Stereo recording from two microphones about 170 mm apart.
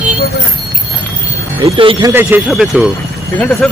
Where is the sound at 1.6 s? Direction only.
30° right (ahead or behind).